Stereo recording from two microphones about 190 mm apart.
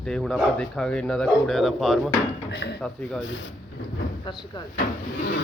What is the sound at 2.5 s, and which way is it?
Speech, 60° left (ahead or behind).